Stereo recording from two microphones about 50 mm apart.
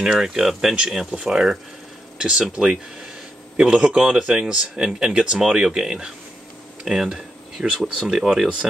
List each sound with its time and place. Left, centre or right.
0.0 s speech: centre
3.5 s speech: right